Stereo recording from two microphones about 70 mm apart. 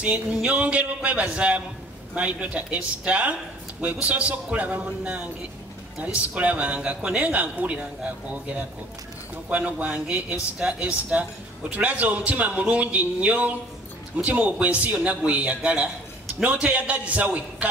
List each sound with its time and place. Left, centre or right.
0.0 s music: centre
0.5 s a man's voice: centre
9.5 s a man's voice: right